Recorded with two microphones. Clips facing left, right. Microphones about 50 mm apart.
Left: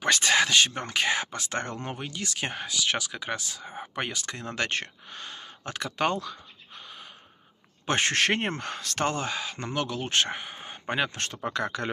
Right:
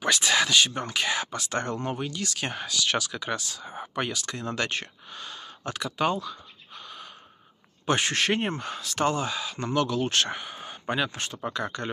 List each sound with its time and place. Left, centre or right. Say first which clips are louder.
0.0 s speech: left 1 dB; left
5.9 s speech: right 1 dB; left
7.8 s speech: even; left
9.6 s speech: right 9 dB; left
11.5 s speech: left 3 dB; left